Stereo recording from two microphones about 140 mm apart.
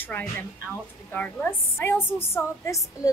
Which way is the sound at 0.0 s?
15° left (ahead or behind).